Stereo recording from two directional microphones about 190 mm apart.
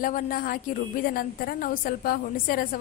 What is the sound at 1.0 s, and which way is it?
A woman's voice, 50° left (ahead or behind).